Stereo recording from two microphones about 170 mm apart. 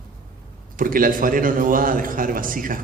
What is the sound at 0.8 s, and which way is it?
A man's voice, 55° right (ahead or behind).